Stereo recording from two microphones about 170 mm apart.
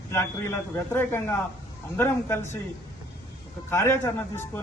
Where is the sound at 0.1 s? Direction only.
15° left (ahead or behind).